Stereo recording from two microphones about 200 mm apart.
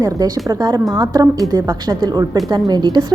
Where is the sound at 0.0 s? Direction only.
20° right (ahead or behind).